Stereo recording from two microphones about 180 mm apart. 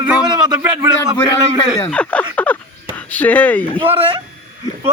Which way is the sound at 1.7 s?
10° left (ahead or behind).